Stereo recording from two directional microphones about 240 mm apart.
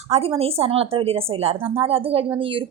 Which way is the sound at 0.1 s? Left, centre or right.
Right.